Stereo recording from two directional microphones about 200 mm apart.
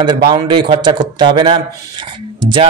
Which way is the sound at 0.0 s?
20° right (ahead or behind).